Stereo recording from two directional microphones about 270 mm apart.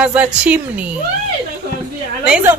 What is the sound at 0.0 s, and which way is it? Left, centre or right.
Speech, centre.